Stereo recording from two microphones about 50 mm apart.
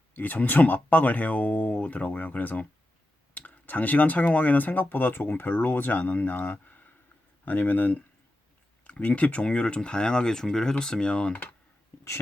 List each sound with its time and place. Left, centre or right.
0.1 s speech: left